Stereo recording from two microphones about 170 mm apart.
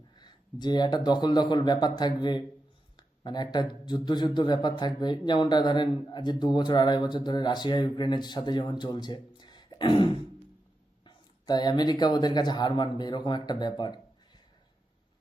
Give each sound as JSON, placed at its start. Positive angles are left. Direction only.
{"t": 0.2, "sound": "a man's voice", "side_deg": 25}